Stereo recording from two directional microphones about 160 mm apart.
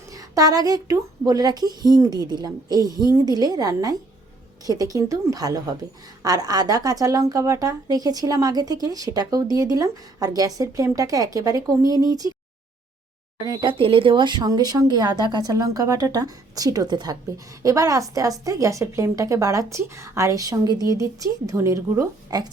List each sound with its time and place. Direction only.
0.1 s speech: 20° right (ahead or behind)
13.4 s speech: 25° right (ahead or behind)